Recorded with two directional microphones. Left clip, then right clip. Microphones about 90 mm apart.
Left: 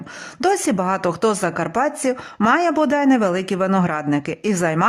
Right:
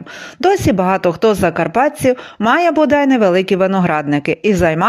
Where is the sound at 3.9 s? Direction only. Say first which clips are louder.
Right 6 dB; 35° right (ahead or behind).